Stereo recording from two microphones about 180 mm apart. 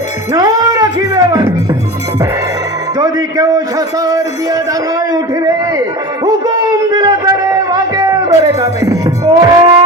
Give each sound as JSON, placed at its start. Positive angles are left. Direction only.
{"t": 0.3, "sound": "music", "side_deg": -20}
{"t": 3.0, "sound": "a man's voice", "side_deg": -20}
{"t": 6.2, "sound": "a sound", "side_deg": -20}